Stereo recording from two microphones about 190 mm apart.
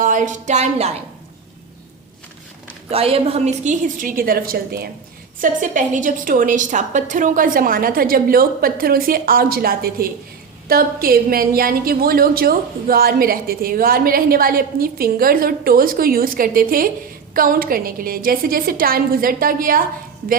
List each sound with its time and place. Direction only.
0.0 s speech: 40° right (ahead or behind)
2.9 s a woman's voice: 30° right (ahead or behind); by 4.9 s 55° right (ahead or behind)
5.4 s a woman's voice: 40° right (ahead or behind)